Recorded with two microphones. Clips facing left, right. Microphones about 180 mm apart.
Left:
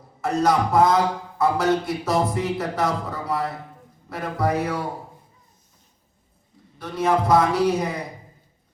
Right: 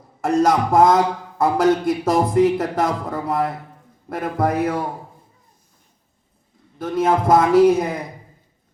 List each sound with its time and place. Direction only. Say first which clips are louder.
0.2 s a man's voice: right 3 dB; 50° right (ahead or behind)
6.7 s a man's voice: right 3 dB; 50° right (ahead or behind)